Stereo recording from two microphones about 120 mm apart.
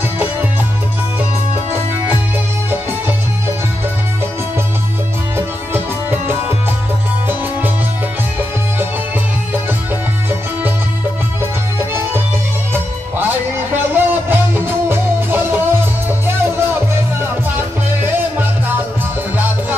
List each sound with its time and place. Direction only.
5.7 s music: 20° right (ahead or behind)
11.9 s music: 20° right (ahead or behind)